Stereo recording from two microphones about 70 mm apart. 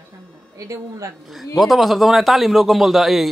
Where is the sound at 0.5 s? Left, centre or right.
Right.